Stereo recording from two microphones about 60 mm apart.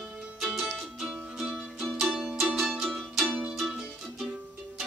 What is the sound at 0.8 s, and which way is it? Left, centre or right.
Music, centre.